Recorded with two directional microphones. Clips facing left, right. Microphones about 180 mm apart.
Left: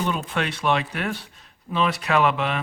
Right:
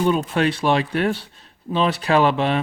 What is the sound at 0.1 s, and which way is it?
Speech, 35° right (ahead or behind).